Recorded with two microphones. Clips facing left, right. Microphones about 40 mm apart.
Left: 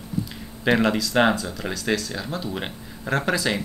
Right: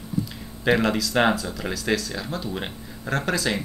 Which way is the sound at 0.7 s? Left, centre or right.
Centre.